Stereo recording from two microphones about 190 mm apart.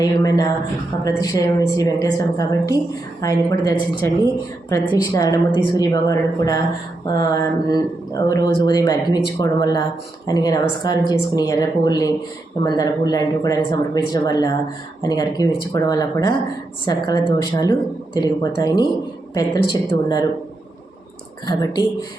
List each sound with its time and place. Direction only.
0.0 s a woman's voice: 20° left (ahead or behind)
21.4 s a woman's voice: 20° left (ahead or behind)